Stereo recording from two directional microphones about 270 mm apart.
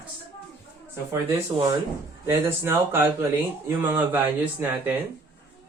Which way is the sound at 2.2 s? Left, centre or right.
Centre.